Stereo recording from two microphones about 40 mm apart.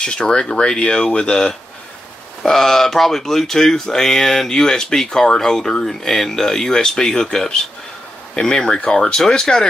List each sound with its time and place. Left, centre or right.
0.0 s speech: centre